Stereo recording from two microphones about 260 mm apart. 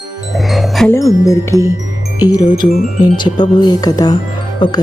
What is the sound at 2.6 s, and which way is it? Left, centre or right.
Speech, left.